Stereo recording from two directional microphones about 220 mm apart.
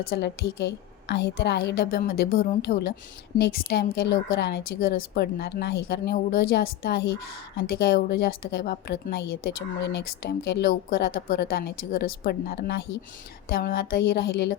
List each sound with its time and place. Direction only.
0.1 s a woman's voice: 50° left (ahead or behind)